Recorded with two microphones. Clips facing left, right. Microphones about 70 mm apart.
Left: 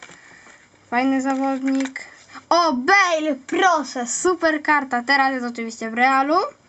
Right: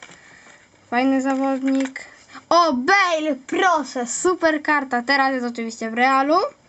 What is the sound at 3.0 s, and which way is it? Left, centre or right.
A child's voice, centre.